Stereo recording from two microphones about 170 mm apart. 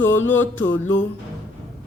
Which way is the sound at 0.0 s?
10° left (ahead or behind).